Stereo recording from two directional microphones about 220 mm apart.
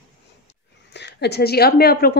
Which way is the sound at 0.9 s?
50° left (ahead or behind).